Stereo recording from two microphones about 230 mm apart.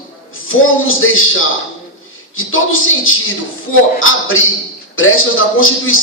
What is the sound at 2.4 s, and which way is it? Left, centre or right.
A man's voice, left.